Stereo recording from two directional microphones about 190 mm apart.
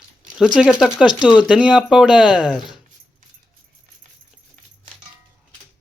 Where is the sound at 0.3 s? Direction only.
5° right (ahead or behind).